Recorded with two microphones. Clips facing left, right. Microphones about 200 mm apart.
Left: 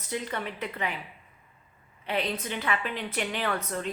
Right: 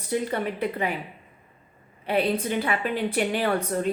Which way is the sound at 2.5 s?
40° right (ahead or behind).